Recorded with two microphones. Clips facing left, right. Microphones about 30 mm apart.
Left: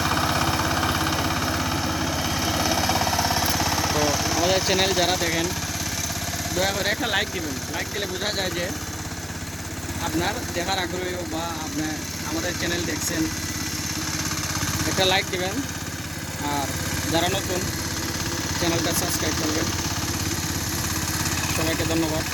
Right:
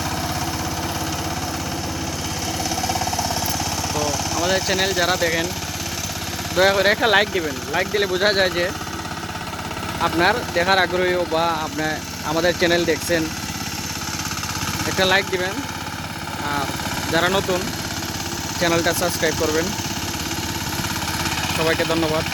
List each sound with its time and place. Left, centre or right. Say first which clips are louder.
0.1 s vehicle: left 3 dB; left; by 5.5 s centre
6.6 s speech: right 9 dB; right
10.0 s speech: right 8 dB; right
14.8 s speech: right 4 dB; centre
16.4 s speech: right 2 dB; right
18.6 s speech: right 6 dB; centre
21.2 s speech: right 6 dB; right